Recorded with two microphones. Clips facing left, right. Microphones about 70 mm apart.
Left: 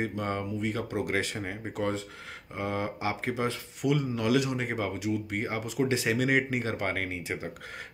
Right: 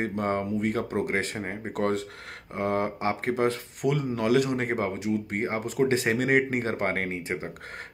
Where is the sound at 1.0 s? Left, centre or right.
Right.